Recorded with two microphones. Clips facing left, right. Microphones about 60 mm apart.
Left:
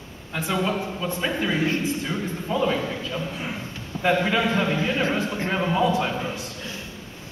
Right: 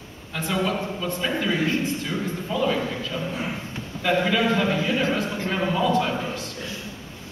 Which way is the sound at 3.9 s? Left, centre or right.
Centre.